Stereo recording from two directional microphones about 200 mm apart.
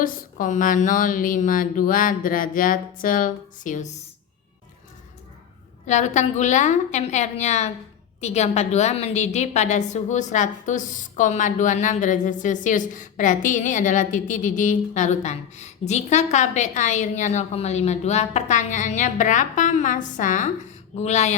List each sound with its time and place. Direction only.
0.0 s speech: 40° left (ahead or behind)
5.8 s a woman's voice: 35° left (ahead or behind)